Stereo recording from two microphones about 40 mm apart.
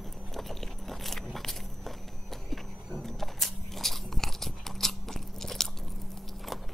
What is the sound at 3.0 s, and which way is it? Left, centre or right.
Biting, centre.